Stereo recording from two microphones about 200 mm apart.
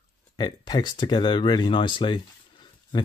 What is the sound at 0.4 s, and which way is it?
Speech, 20° left (ahead or behind).